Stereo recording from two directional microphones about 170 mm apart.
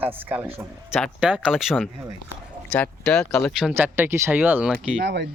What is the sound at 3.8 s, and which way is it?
Speech, 15° right (ahead or behind).